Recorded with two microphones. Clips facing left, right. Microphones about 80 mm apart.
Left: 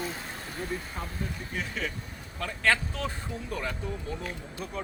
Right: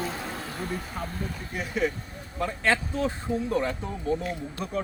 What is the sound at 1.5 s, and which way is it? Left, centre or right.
Speech, right.